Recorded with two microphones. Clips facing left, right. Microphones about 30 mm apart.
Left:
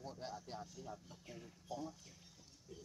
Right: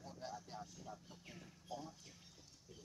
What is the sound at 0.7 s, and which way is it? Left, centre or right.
Speech, centre.